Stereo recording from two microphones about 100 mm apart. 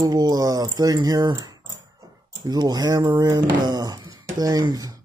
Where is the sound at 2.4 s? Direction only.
40° right (ahead or behind).